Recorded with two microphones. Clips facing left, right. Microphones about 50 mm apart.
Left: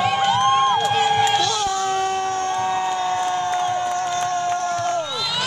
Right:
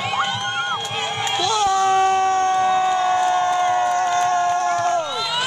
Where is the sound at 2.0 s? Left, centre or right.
Right.